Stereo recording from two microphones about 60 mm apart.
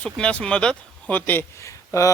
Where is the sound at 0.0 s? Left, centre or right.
Centre.